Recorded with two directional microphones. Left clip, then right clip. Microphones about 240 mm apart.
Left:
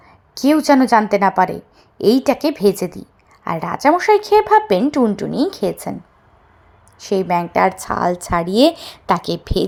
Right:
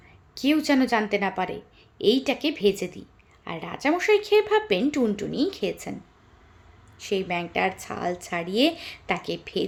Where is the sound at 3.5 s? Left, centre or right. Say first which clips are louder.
Left 11 dB; left.